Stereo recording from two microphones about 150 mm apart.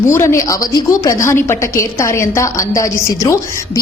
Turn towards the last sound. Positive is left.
turn(degrees=20)  # may be behind; listen again after turning